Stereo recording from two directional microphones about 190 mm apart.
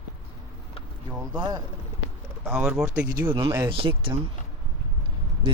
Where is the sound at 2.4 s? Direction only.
5° right (ahead or behind).